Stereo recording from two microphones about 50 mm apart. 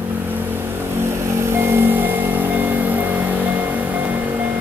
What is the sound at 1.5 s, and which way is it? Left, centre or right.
Vehicle, right.